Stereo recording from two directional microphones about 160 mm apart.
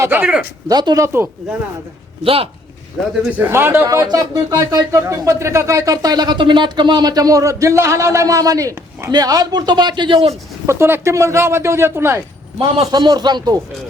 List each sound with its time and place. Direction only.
0.0 s speech: 10° right (ahead or behind)
0.7 s speech: 25° right (ahead or behind)
2.2 s speech: 35° right (ahead or behind)
3.3 s speech: 15° right (ahead or behind); by 10.3 s 35° right (ahead or behind)
10.7 s speech: 15° right (ahead or behind)
12.5 s speech: 30° right (ahead or behind)